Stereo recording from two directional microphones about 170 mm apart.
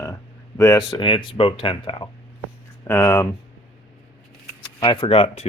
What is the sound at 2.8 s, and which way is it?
Speech, 15° left (ahead or behind).